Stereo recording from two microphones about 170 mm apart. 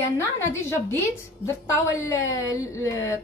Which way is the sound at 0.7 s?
15° left (ahead or behind).